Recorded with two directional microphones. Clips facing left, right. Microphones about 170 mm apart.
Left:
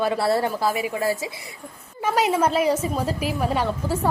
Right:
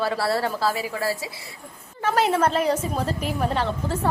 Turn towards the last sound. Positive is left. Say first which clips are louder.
# left 1 dB
turn(degrees=10)  # may be behind; listen again after turning